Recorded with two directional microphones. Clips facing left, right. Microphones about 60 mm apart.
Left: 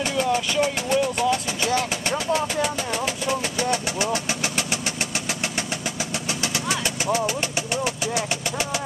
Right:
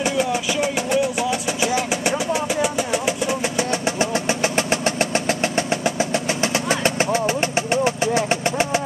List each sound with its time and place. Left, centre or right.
0.0 s speech: centre
1.6 s vehicle: centre; by 8.8 s right